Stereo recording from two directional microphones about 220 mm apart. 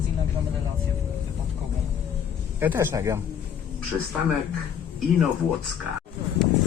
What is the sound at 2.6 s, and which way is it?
Speech, 10° right (ahead or behind).